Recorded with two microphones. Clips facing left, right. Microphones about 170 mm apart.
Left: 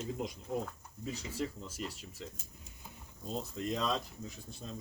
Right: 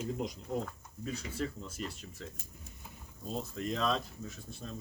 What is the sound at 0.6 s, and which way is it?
Speech, 10° left (ahead or behind).